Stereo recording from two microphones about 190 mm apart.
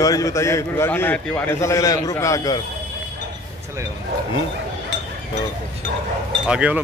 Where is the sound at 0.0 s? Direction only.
15° left (ahead or behind).